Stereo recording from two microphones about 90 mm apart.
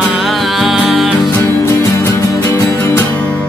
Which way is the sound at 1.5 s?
35° left (ahead or behind).